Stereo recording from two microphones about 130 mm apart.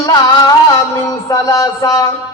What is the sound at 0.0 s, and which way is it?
Music, 30° left (ahead or behind).